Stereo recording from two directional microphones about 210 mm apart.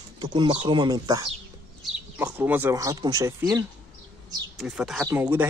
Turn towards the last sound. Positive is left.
turn(degrees=-10)  # may be behind; listen again after turning